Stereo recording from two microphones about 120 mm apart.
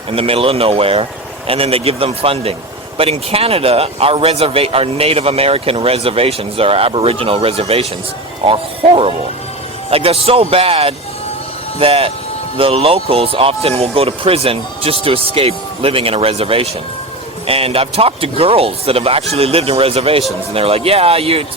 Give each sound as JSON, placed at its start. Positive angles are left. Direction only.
{"t": 0.1, "sound": "speech", "side_deg": -50}